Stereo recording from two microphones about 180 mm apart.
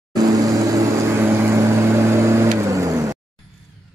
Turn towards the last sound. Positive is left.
turn(degrees=-15)  # may be behind; listen again after turning